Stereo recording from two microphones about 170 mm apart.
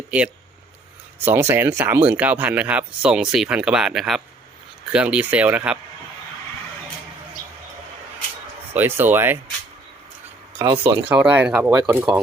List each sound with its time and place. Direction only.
0.1 s speech: 10° right (ahead or behind)
8.7 s speech: 10° right (ahead or behind)
10.6 s speech: 25° right (ahead or behind)
11.1 s speech: 10° right (ahead or behind)